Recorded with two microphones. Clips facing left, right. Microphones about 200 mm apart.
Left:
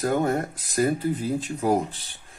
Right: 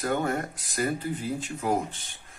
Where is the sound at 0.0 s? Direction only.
35° left (ahead or behind).